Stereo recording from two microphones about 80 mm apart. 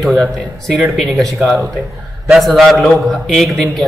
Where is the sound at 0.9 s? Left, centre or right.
Centre.